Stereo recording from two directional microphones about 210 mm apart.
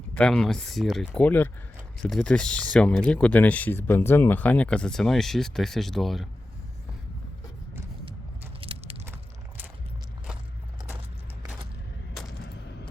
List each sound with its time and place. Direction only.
0.1 s speech: 5° left (ahead or behind)
8.6 s biting: 25° right (ahead or behind)